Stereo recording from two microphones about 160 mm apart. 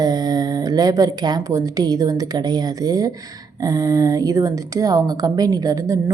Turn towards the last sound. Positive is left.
turn(degrees=-20)  # may be behind; listen again after turning